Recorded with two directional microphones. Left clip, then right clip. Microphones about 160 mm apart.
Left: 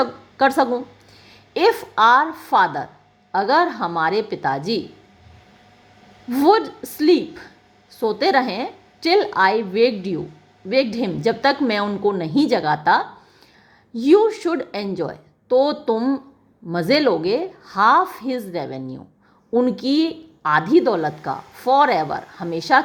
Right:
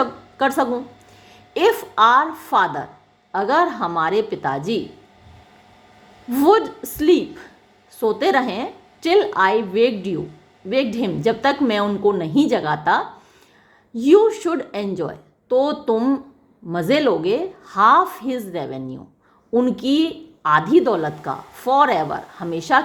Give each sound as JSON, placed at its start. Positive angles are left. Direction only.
{"t": 0.0, "sound": "a sound", "side_deg": 15}
{"t": 1.3, "sound": "a woman's voice", "side_deg": 10}
{"t": 6.3, "sound": "a woman's voice", "side_deg": 10}